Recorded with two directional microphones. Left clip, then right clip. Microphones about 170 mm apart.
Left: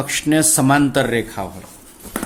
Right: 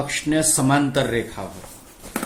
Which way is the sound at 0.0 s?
50° left (ahead or behind).